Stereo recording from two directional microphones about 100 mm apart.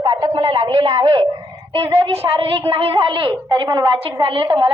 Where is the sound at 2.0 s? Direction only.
70° right (ahead or behind).